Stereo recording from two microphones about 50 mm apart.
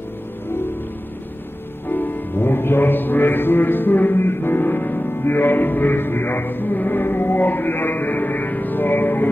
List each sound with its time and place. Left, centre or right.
1.9 s music: left